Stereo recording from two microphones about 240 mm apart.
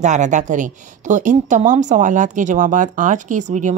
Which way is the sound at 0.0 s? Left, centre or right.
Right.